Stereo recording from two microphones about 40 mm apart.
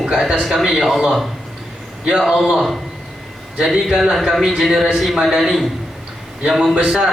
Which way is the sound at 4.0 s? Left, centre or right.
Centre.